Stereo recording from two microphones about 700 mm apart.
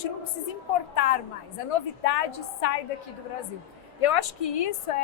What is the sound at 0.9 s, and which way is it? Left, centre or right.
A woman's voice, left.